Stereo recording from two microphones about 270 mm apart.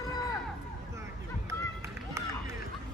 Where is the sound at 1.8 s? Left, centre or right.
Centre.